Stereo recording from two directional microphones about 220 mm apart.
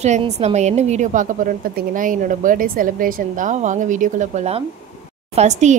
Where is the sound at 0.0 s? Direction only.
30° right (ahead or behind).